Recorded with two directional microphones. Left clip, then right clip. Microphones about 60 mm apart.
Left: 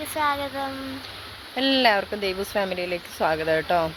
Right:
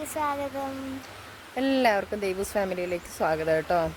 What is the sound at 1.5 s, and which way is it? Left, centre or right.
Speech, right.